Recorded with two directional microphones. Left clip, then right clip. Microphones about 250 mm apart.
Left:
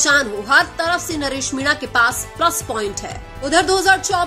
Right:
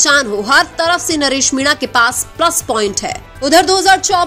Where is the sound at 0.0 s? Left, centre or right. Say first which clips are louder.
Right 4 dB; right.